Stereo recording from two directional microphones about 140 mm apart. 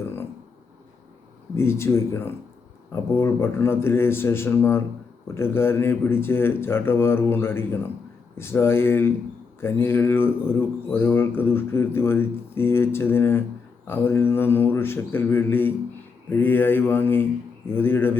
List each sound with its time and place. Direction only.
1.5 s speech: 20° left (ahead or behind)